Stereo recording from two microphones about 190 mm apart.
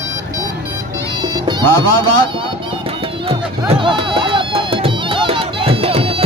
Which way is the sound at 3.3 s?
30° right (ahead or behind).